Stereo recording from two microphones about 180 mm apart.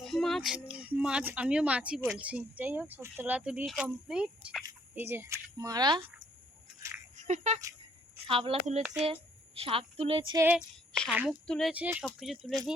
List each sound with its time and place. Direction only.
0.0 s child singing: centre (ahead or behind)
0.7 s speech: 5° right (ahead or behind); by 6.0 s 20° right (ahead or behind)
6.8 s a sound: 15° right (ahead or behind)
7.2 s a woman's voice: 40° right (ahead or behind)
9.6 s a woman's voice: 30° right (ahead or behind)
10.3 s speech: 10° right (ahead or behind)
11.4 s speech: 5° left (ahead or behind)
11.7 s speech: 10° right (ahead or behind)